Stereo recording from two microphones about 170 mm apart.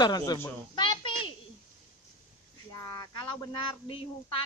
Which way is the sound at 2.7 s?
20° left (ahead or behind).